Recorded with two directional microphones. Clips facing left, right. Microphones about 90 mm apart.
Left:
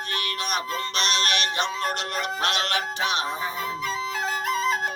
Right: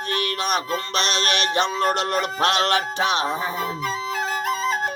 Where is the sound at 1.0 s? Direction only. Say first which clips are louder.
Even; 35° right (ahead or behind).